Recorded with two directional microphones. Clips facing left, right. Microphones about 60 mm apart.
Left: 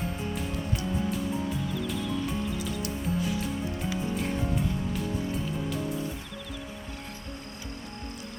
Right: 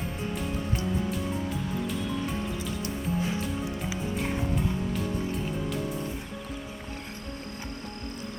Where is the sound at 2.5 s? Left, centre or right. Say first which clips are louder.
Even; right.